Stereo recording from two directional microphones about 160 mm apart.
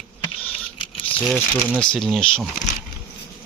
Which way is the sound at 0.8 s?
35° left (ahead or behind).